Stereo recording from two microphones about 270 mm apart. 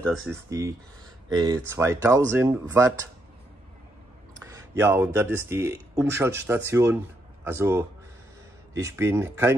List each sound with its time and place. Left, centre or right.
0.0 s speech: centre
4.6 s speech: centre